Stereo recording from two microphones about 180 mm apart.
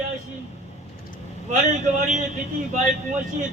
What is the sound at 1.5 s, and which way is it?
Speech, 45° right (ahead or behind).